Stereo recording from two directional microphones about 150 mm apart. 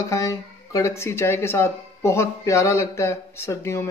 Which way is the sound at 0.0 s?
20° left (ahead or behind).